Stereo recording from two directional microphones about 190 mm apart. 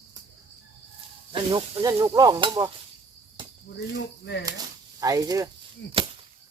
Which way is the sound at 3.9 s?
65° left (ahead or behind).